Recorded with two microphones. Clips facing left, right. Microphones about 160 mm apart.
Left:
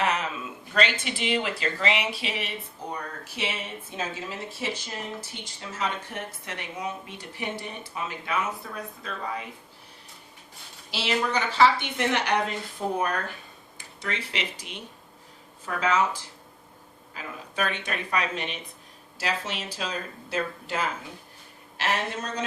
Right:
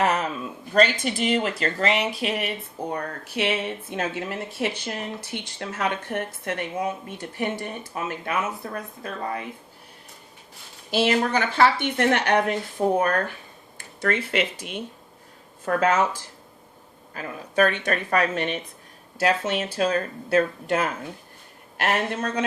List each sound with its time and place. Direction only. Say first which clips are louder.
0.0 s a sound: right 4 dB; 45° right (ahead or behind)
0.8 s speech: right 6 dB; 45° right (ahead or behind)
2.9 s speech: right 6 dB; 60° right (ahead or behind)
10.9 s speech: right 6 dB; 50° right (ahead or behind)
13.7 s speech: right 9 dB; 55° right (ahead or behind)
17.2 s speech: right 9 dB; 50° right (ahead or behind)